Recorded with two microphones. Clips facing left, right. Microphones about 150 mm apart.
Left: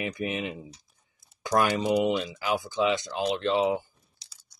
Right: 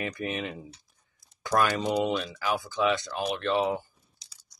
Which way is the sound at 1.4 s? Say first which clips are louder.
Left 1 dB; 15° left (ahead or behind).